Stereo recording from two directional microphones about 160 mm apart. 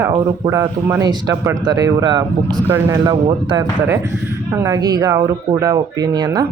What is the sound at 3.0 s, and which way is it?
Speech, 25° right (ahead or behind).